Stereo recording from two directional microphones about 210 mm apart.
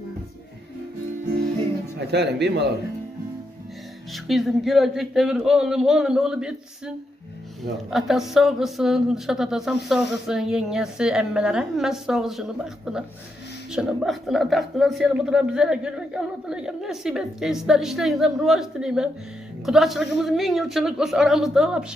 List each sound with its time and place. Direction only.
2.0 s speech: 55° right (ahead or behind)
4.1 s a man's voice: centre (ahead or behind)
7.7 s a man's voice: centre (ahead or behind)